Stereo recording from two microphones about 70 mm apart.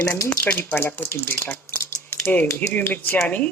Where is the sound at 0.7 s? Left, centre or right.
Left.